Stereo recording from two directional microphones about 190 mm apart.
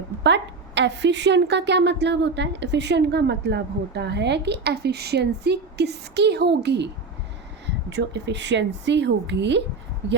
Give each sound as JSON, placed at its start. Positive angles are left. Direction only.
{"t": 0.2, "sound": "a woman's voice", "side_deg": -70}